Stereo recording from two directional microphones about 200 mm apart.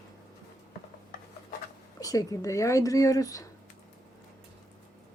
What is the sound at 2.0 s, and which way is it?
Speech, 15° left (ahead or behind).